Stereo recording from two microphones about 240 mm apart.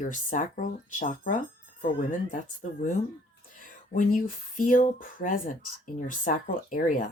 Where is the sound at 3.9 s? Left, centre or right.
Left.